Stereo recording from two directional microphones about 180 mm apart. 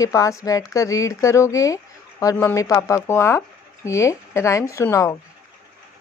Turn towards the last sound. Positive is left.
turn(degrees=20)  # may be behind; listen again after turning